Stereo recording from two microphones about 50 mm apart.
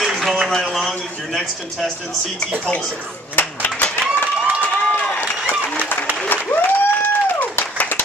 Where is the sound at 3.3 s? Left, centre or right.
Left.